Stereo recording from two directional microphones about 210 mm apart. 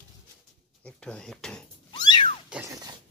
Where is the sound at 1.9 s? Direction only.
20° left (ahead or behind).